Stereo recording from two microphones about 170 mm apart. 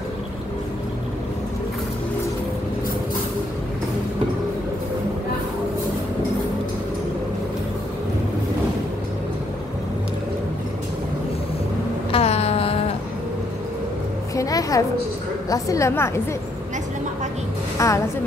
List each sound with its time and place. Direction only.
12.1 s a sound: 35° left (ahead or behind)
14.3 s music: 20° left (ahead or behind)
15.5 s a woman's voice: 20° left (ahead or behind)
17.7 s a woman's voice: 20° left (ahead or behind)